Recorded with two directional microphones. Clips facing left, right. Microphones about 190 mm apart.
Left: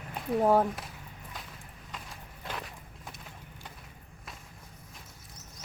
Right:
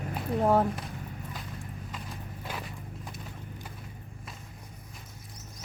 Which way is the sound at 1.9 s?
Centre (ahead or behind).